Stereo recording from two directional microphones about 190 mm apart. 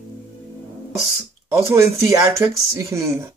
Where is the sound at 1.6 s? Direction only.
15° right (ahead or behind).